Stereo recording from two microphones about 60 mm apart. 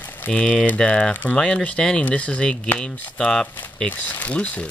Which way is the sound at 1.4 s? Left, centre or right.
Centre.